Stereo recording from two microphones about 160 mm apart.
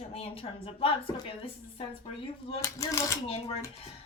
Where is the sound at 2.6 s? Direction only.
20° left (ahead or behind).